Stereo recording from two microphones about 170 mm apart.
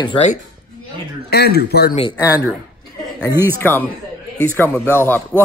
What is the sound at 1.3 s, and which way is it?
Speech, 70° left (ahead or behind).